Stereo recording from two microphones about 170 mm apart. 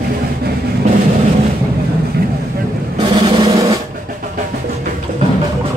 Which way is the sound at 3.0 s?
30° right (ahead or behind).